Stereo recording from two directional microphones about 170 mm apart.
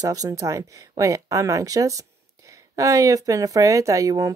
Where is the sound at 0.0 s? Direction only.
20° right (ahead or behind).